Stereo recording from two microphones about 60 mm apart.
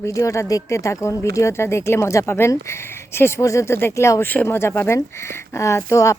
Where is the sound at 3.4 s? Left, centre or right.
Left.